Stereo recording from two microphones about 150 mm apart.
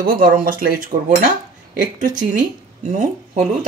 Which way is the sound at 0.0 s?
70° right (ahead or behind).